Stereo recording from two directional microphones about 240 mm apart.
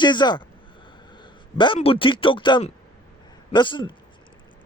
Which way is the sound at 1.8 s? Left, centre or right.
Left.